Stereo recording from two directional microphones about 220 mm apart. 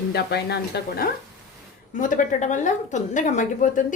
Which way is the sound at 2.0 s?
35° left (ahead or behind).